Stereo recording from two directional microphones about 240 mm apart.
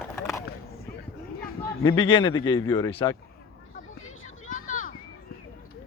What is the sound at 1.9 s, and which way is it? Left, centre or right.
Speech, left.